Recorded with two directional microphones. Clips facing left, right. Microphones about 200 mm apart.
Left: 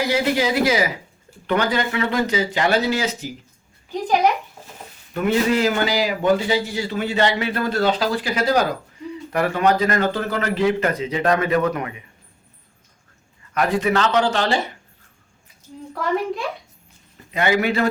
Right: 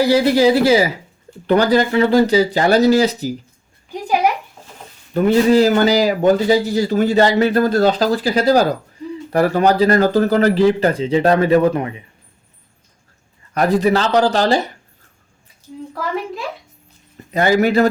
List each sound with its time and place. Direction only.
0.0 s a man's voice: 35° right (ahead or behind)
3.9 s a sound: 10° right (ahead or behind)
5.1 s a man's voice: 35° right (ahead or behind)
13.5 s a man's voice: 35° right (ahead or behind)
15.9 s a child's voice: centre (ahead or behind)
17.3 s a man's voice: 40° right (ahead or behind)